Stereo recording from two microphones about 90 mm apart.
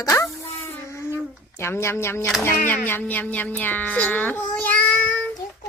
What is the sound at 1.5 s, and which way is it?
Speech, 30° left (ahead or behind).